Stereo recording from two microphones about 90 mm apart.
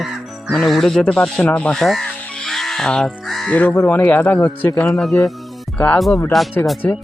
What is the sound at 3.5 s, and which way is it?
Speech, 20° left (ahead or behind).